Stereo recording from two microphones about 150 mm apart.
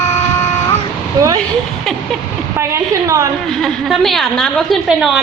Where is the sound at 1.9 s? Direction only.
Centre (ahead or behind).